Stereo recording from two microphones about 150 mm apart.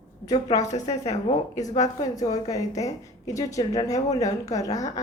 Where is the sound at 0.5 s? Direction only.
25° left (ahead or behind).